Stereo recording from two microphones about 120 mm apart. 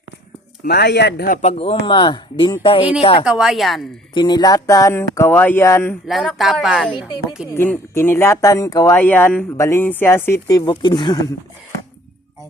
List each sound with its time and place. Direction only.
1.4 s speech: 60° left (ahead or behind)
3.2 s speech: 5° right (ahead or behind)
4.1 s speech: 40° left (ahead or behind); by 6.0 s 20° left (ahead or behind)
6.1 s speech: centre (ahead or behind)
7.5 s speech: 20° left (ahead or behind)
9.0 s speech: 15° left (ahead or behind); by 11.3 s 30° left (ahead or behind)